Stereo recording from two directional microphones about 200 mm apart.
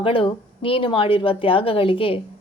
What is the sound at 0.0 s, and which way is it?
A woman's voice, 25° left (ahead or behind).